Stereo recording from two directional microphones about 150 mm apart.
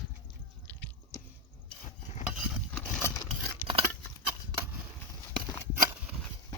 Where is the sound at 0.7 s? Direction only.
10° left (ahead or behind).